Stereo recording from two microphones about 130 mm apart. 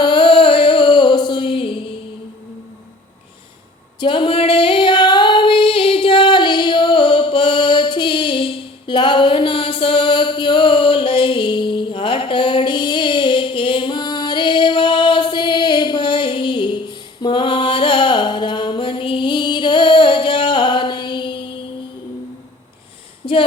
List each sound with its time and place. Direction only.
0.0 s music: 40° left (ahead or behind)
4.0 s female singing: 40° left (ahead or behind)
23.2 s a capella: 40° left (ahead or behind)